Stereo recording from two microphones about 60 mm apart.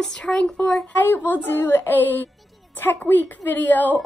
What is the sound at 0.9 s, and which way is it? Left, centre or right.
A woman's voice, left.